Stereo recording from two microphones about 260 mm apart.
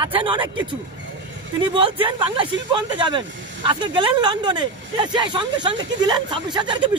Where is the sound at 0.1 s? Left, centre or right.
Centre.